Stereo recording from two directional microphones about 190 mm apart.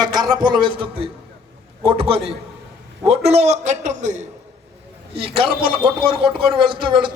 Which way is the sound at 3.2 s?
35° right (ahead or behind).